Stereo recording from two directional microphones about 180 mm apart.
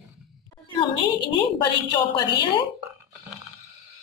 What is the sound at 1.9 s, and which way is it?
Speech, 25° left (ahead or behind).